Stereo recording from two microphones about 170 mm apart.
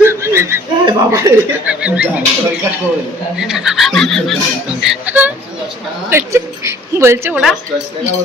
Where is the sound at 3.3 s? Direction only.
5° right (ahead or behind).